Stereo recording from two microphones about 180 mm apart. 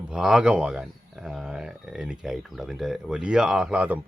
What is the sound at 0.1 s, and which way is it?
Speech, 5° right (ahead or behind).